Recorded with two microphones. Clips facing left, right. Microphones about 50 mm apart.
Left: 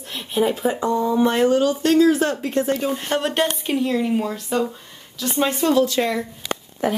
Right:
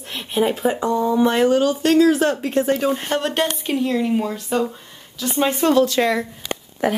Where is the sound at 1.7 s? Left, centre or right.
Right.